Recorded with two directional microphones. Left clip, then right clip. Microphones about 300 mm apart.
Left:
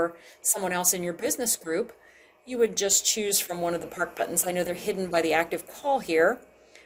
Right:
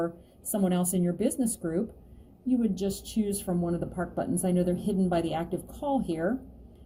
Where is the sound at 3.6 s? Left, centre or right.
Left.